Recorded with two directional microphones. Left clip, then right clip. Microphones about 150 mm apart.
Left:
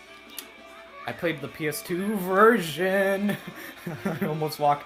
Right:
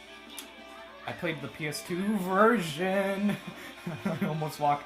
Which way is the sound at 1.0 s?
35° left (ahead or behind).